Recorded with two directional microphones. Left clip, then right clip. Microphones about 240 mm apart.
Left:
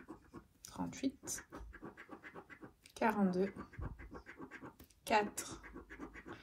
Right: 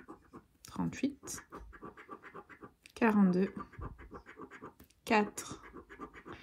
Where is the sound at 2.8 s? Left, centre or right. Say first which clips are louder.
Right 5 dB; right.